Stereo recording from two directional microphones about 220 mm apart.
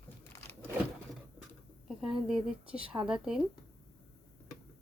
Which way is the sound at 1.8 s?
Centre (ahead or behind).